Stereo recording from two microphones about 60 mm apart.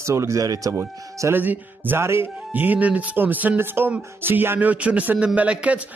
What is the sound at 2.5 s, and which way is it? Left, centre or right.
A man's voice, right.